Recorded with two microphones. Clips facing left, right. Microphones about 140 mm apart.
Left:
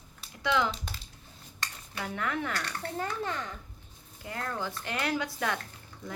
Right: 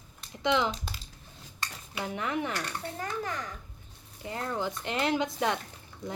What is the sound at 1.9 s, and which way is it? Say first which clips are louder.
Speech: right 1 dB; 20° right (ahead or behind).